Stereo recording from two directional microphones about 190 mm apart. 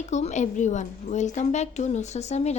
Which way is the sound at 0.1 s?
35° left (ahead or behind).